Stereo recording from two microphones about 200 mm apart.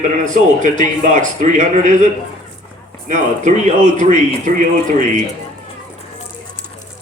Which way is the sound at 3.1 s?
35° right (ahead or behind).